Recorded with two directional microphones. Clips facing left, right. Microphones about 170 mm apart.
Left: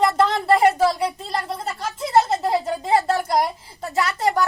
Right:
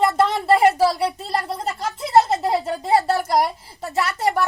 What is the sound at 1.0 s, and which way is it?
Speech, 30° right (ahead or behind).